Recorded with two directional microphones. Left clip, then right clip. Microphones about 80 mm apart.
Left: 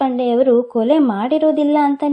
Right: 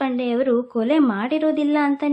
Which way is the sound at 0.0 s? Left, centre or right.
Left.